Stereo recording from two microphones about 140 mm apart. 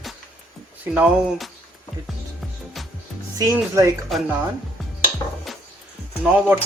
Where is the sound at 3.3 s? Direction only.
20° right (ahead or behind).